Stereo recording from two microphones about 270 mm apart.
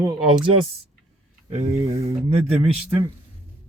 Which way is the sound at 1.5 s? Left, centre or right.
Right.